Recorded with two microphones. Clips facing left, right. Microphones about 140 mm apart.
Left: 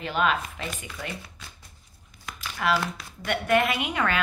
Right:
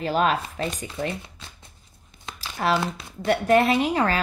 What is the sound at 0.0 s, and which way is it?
A woman's voice, 40° right (ahead or behind).